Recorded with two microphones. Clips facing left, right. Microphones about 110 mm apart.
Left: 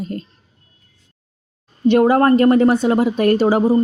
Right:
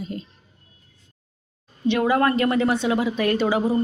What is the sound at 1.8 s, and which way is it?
Speech, 45° left (ahead or behind).